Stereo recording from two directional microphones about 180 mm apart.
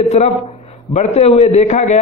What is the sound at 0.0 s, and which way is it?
A man's voice, 35° left (ahead or behind).